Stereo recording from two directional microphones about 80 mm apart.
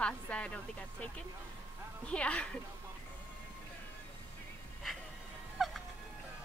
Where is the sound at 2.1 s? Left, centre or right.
Centre.